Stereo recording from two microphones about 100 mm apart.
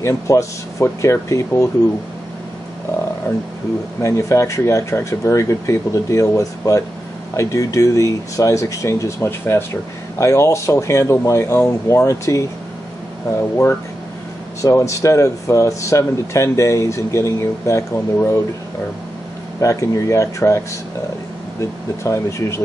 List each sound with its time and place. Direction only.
0.0 s speech: 30° left (ahead or behind)
3.3 s speech: 20° left (ahead or behind)
14.6 s speech: 30° left (ahead or behind)
19.6 s speech: 35° left (ahead or behind)